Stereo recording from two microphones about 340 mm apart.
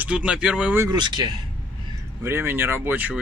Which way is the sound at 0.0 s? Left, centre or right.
Centre.